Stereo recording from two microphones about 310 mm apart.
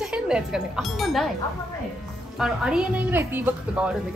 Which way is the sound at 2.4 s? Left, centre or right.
Centre.